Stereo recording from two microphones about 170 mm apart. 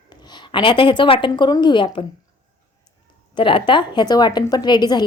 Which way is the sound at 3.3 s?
30° left (ahead or behind).